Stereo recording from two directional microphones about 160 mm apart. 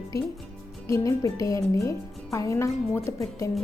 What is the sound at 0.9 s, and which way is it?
A woman's voice, 20° left (ahead or behind).